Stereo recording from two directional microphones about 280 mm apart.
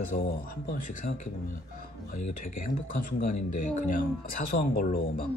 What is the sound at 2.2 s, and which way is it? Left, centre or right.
Speech, left.